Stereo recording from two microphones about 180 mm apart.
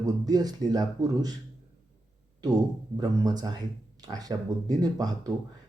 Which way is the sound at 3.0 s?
20° right (ahead or behind).